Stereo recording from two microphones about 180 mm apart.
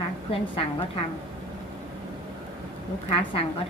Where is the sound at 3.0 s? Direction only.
30° left (ahead or behind).